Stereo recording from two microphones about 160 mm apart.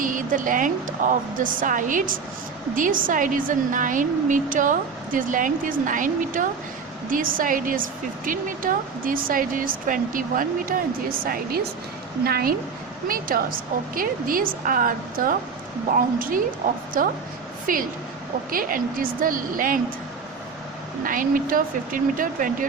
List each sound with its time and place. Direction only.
0.0 s a woman's voice: 55° right (ahead or behind)
11.2 s a woman's voice: 70° right (ahead or behind)
21.0 s a woman's voice: 60° right (ahead or behind)